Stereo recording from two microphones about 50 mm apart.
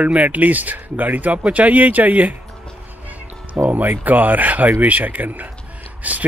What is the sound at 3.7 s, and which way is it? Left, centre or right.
Speech, right.